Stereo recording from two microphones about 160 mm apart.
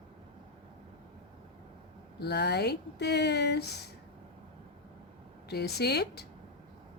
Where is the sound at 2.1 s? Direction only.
90° left.